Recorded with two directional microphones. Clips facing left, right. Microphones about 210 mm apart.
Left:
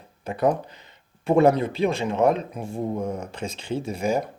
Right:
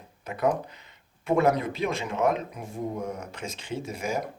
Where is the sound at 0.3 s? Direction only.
30° left (ahead or behind).